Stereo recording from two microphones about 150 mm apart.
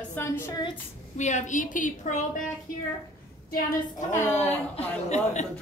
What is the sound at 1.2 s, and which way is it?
A woman's voice, 50° left (ahead or behind).